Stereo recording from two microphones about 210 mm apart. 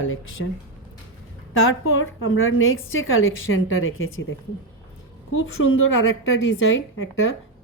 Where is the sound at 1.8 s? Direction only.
70° left (ahead or behind).